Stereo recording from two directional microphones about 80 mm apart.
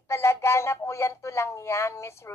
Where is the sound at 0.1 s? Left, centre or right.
Left.